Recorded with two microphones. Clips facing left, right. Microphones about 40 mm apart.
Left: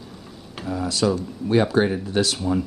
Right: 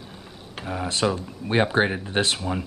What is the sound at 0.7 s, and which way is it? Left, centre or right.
Speech, right.